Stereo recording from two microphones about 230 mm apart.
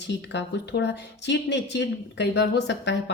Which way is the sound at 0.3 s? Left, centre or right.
Left.